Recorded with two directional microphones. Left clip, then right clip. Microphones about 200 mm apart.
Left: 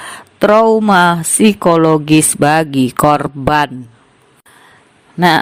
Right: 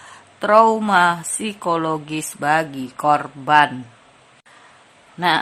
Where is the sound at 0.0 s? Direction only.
45° left (ahead or behind).